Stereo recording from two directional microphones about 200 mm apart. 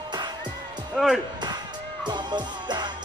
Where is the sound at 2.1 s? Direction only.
20° right (ahead or behind).